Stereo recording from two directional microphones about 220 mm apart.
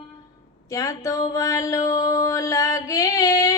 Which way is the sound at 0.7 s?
15° left (ahead or behind).